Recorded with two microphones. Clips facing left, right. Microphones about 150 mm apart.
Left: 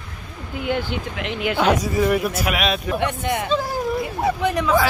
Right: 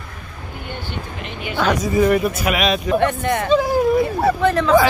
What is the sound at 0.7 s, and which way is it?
Speech, 90° left.